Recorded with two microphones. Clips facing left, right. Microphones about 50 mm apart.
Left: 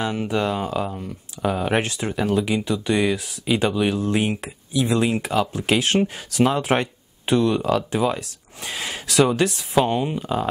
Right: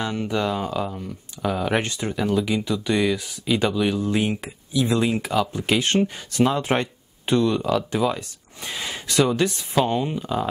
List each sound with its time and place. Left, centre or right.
0.0 s speech: centre
5.5 s speech: centre